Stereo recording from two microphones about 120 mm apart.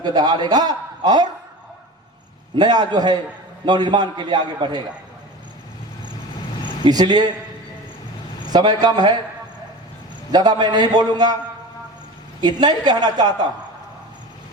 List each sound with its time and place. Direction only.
0.0 s a man's voice: 35° right (ahead or behind)
2.6 s a man's voice: 35° right (ahead or behind)
6.8 s a man's voice: 35° right (ahead or behind)
8.4 s a man's voice: 35° right (ahead or behind)
10.3 s a man's voice: 35° right (ahead or behind)
12.4 s a man's voice: 35° right (ahead or behind)